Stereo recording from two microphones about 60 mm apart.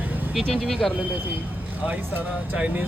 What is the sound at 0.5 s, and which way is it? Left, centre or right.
Speech, centre.